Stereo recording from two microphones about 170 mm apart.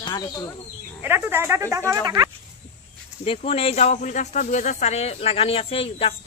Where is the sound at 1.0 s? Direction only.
15° right (ahead or behind).